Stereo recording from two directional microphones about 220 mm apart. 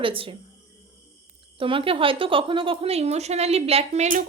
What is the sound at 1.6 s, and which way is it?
A woman's voice, 25° right (ahead or behind).